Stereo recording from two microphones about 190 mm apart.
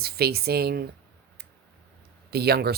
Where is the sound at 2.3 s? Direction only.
55° right (ahead or behind).